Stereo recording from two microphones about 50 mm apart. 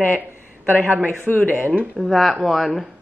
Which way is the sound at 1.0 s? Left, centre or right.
Left.